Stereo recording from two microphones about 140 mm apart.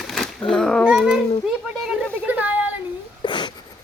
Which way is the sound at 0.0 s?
Centre (ahead or behind).